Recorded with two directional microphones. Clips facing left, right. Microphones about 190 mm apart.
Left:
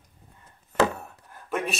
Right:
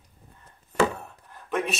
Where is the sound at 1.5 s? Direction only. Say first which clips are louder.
Right 1 dB; centre (ahead or behind).